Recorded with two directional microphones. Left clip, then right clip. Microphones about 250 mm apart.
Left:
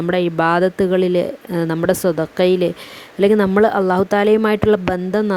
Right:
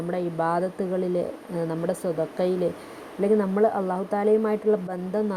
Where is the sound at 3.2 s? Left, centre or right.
Left.